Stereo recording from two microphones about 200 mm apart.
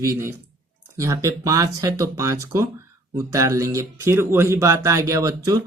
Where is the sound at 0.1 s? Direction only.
15° right (ahead or behind).